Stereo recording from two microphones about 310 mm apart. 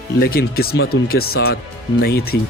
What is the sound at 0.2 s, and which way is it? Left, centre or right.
Speech, left.